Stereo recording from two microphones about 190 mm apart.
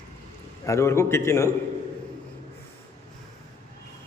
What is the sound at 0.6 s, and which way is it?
Speech, 15° left (ahead or behind).